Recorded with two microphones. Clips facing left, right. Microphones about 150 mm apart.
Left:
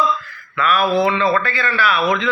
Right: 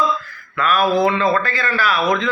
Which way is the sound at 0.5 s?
40° right (ahead or behind).